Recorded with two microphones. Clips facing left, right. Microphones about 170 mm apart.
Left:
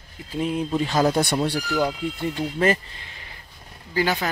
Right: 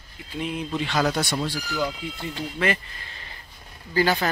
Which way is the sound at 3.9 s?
15° left (ahead or behind).